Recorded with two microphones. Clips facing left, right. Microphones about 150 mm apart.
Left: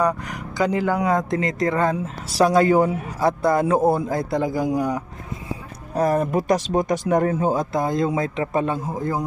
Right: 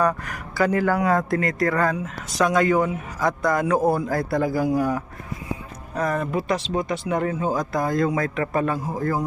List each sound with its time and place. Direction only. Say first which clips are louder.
0.0 s speech: left 1 dB; 15° left (ahead or behind)
5.9 s speech: left 4 dB; 35° left (ahead or behind)
7.5 s speech: left 1 dB; 25° left (ahead or behind)